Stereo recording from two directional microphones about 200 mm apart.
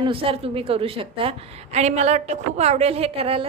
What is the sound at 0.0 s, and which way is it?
A woman's voice, 25° right (ahead or behind).